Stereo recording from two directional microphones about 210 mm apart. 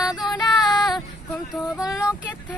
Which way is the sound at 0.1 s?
20° left (ahead or behind).